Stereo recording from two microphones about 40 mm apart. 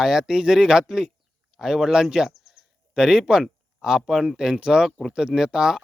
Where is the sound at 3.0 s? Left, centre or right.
Centre.